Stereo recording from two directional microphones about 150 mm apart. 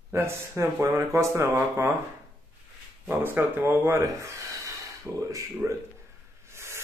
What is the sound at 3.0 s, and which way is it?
Speech, 15° right (ahead or behind).